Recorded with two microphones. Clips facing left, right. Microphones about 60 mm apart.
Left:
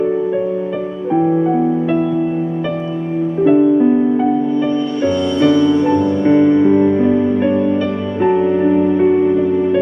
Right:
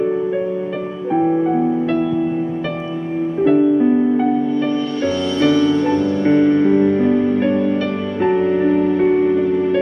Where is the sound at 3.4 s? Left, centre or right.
Left.